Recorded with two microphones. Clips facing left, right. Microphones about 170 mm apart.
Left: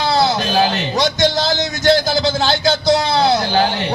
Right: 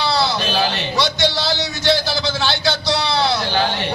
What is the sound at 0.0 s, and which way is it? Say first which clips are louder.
Speech: left 3 dB; 45° left (ahead or behind).